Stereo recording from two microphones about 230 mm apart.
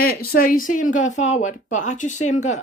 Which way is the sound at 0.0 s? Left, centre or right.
Left.